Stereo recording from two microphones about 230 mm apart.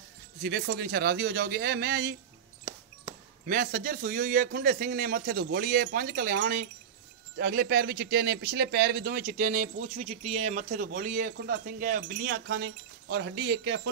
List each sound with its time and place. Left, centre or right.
0.4 s a man's voice: right
3.4 s a man's voice: right